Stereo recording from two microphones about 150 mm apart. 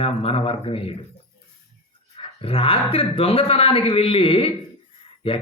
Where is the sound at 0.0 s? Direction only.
40° left (ahead or behind).